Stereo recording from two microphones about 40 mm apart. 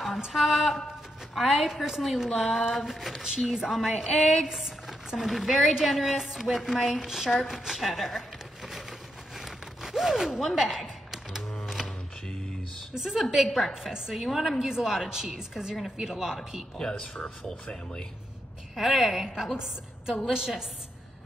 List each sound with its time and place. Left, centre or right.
0.3 s a woman's voice: centre
2.3 s speech: centre
2.7 s a woman's voice: centre
9.4 s a sound: centre
12.9 s a woman's voice: centre
15.0 s a woman's voice: centre
15.5 s a woman's voice: centre
16.7 s speech: centre
18.8 s a woman's voice: centre
19.2 s a woman's voice: centre